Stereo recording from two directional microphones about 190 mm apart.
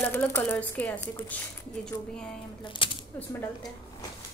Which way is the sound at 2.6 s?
25° left (ahead or behind).